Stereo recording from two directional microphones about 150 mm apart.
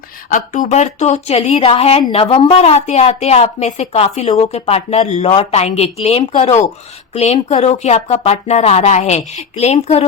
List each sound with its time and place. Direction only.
0.3 s a woman's voice: 60° left (ahead or behind)